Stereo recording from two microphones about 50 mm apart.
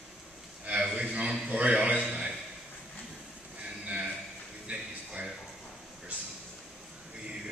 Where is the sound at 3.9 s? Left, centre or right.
Right.